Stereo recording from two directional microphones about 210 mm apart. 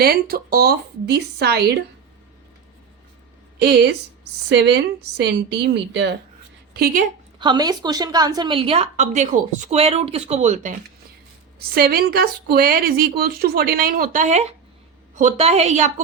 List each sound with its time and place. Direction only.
0.0 s a woman's voice: 45° right (ahead or behind)
3.6 s a woman's voice: 50° right (ahead or behind)
7.3 s a woman's voice: 20° right (ahead or behind)
11.7 s a woman's voice: 45° right (ahead or behind)